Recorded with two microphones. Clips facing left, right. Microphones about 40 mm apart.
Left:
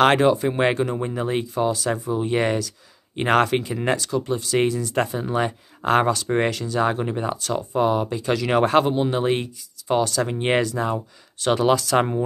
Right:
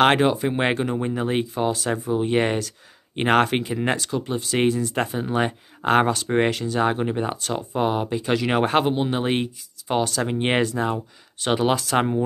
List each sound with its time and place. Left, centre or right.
0.0 s speech: right